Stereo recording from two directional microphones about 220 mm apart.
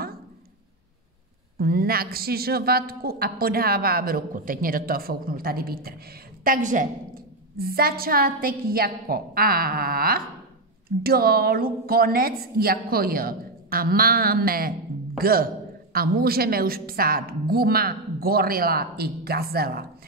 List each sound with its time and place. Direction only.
1.6 s a woman's voice: 45° right (ahead or behind)